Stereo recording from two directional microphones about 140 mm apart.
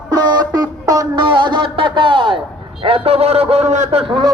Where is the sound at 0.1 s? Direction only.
30° right (ahead or behind).